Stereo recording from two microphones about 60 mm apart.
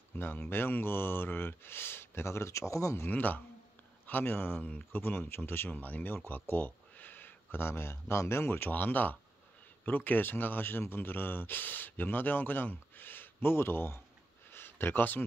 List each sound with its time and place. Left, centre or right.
0.1 s speech: left
3.1 s speech: left
14.5 s a sound: left